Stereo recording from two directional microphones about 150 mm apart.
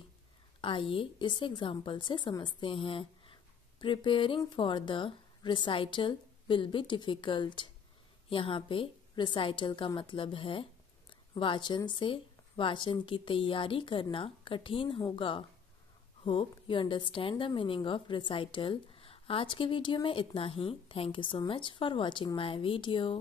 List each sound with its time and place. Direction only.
0.6 s a woman's voice: 35° left (ahead or behind)